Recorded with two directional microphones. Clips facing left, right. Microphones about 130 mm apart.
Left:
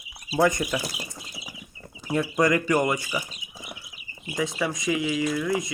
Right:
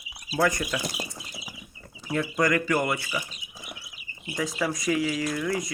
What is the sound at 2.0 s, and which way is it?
Speech, 20° left (ahead or behind).